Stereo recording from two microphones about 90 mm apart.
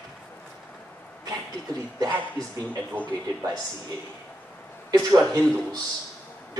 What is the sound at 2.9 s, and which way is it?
Speech, 15° left (ahead or behind).